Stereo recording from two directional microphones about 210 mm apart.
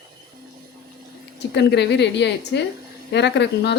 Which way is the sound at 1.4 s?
55° left (ahead or behind).